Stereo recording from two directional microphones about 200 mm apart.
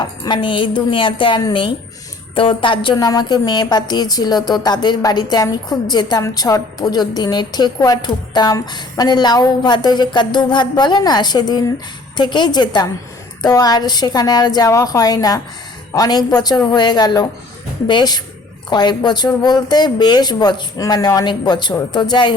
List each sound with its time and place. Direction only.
0.0 s a woman's voice: 25° left (ahead or behind)